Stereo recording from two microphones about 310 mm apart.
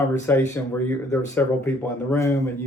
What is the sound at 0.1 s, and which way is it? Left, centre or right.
Speech, centre.